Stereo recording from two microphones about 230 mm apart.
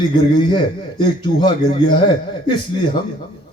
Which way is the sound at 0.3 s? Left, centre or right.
Centre.